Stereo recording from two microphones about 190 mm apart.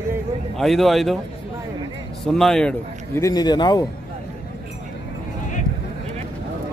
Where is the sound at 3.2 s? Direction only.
20° left (ahead or behind).